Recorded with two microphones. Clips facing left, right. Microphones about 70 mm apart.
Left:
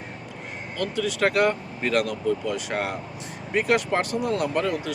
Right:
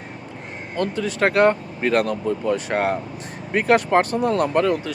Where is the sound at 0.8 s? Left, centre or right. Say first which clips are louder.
Right 3 dB; right.